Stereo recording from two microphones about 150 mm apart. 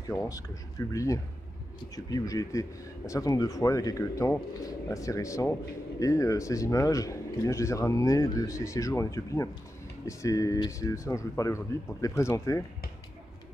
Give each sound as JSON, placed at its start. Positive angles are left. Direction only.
{"t": 0.3, "sound": "speech", "side_deg": 20}